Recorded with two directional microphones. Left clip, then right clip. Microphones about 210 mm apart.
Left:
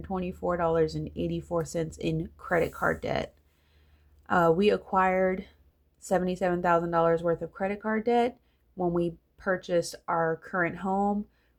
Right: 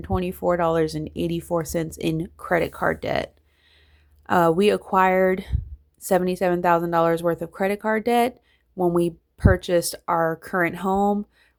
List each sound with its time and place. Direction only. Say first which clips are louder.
0.0 s speech: right 7 dB; 35° right (ahead or behind)
4.3 s speech: right 5 dB; 35° right (ahead or behind)